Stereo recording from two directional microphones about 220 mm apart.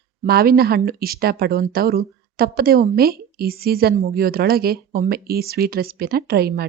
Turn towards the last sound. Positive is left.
turn(degrees=-45)  # may be behind; listen again after turning